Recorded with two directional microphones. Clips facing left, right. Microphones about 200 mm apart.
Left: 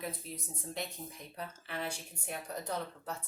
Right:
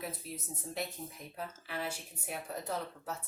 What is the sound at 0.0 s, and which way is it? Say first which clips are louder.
Speech: even; 5° right (ahead or behind).